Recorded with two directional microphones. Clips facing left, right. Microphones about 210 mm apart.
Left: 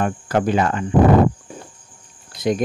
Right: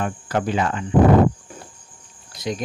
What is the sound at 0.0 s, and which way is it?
Speech, 50° left (ahead or behind).